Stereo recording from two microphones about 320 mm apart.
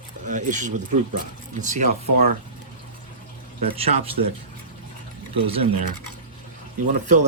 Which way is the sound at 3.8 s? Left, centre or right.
Right.